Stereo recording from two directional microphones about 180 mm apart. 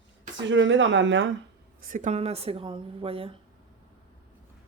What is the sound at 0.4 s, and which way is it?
Speech, 90° right.